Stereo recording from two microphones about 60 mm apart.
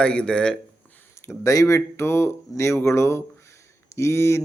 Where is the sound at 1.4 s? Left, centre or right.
Left.